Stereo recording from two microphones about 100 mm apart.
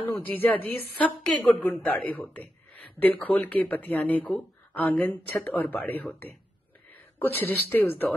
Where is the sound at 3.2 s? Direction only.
15° left (ahead or behind).